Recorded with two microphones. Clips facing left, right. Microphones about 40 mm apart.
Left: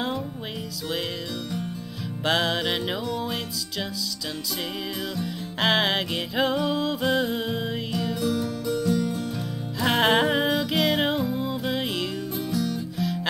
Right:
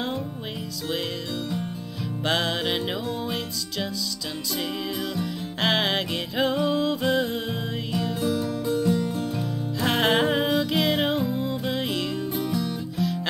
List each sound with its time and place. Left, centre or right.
2.2 s music: centre
5.1 s music: centre
12.4 s music: centre
12.9 s music: centre